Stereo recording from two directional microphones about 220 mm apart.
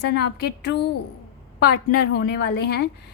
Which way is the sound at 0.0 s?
50° left (ahead or behind).